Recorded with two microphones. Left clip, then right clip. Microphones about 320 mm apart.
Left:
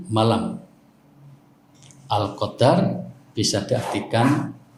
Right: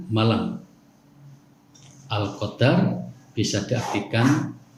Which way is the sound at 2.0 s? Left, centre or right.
Centre.